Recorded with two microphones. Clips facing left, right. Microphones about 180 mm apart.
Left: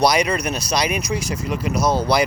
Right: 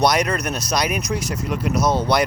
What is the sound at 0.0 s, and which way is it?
Speech, centre (ahead or behind).